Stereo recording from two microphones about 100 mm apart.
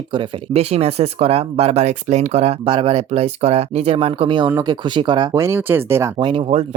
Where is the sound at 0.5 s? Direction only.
90° right; by 4.3 s 75° right (ahead or behind).